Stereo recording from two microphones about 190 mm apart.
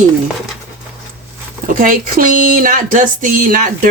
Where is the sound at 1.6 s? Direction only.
45° right (ahead or behind).